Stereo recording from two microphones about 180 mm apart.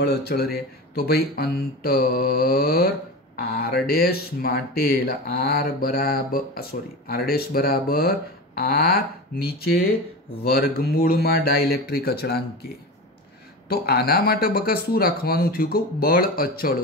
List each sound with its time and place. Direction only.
0.0 s speech: 60° left (ahead or behind)